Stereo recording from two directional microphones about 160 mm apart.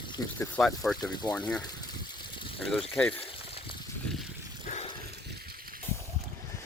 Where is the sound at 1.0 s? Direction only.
25° left (ahead or behind).